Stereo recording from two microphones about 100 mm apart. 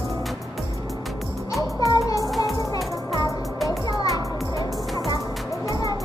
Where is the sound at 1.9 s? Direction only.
35° left (ahead or behind).